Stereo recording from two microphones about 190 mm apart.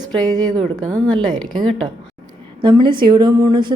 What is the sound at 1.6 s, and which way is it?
Speech, centre (ahead or behind).